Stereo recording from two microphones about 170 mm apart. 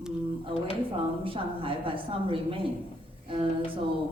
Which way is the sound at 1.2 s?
30° right (ahead or behind).